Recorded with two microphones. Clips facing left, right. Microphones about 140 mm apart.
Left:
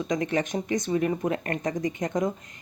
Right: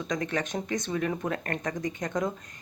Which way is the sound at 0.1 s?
20° left (ahead or behind).